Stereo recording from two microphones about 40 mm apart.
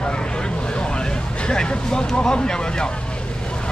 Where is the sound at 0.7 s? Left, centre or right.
Left.